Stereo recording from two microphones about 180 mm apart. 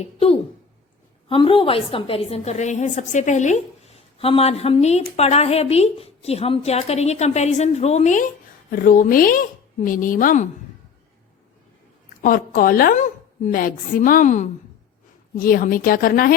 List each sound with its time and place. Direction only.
0.0 s a woman's voice: 30° left (ahead or behind); by 10.4 s 50° left (ahead or behind)
12.2 s a woman's voice: 50° left (ahead or behind)